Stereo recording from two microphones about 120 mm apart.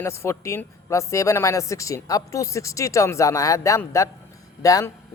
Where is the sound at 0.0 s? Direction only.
25° left (ahead or behind).